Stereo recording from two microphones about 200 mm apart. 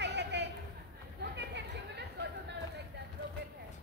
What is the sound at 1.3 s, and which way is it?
Chatter, 60° right (ahead or behind).